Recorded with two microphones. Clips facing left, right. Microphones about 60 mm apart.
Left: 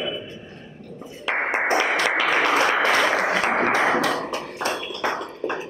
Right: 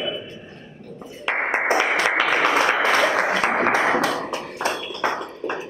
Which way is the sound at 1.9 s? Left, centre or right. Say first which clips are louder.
Right 1 dB; right.